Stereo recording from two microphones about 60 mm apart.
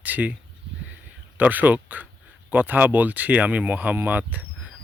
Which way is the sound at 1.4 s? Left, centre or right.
Right.